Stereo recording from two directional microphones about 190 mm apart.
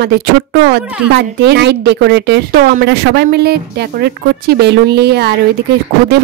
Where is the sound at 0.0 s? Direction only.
60° right (ahead or behind).